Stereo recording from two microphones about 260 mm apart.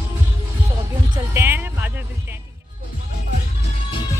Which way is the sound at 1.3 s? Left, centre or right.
Centre.